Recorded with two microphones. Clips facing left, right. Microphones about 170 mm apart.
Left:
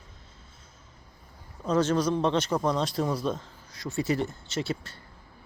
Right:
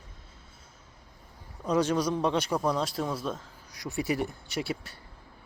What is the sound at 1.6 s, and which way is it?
Speech, 15° right (ahead or behind).